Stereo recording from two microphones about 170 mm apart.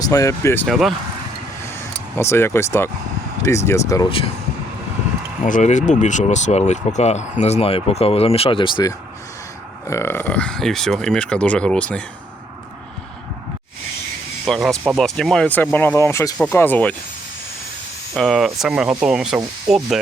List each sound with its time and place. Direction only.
0.1 s speech: 20° left (ahead or behind)
0.7 s speech: centre (ahead or behind)
2.1 s speech: 15° left (ahead or behind)
5.4 s speech: 45° left (ahead or behind); by 12.0 s 5° left (ahead or behind)
14.4 s speech: centre (ahead or behind)
18.1 s speech: centre (ahead or behind)